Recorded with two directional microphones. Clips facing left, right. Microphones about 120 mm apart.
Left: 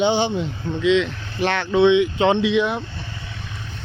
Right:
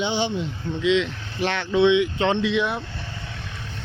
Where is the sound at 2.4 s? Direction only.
Centre (ahead or behind).